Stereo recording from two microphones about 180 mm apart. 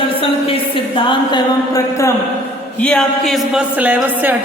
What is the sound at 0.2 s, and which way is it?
A woman's voice, 30° left (ahead or behind).